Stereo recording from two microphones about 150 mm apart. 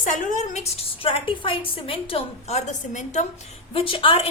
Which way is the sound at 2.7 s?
55° left (ahead or behind).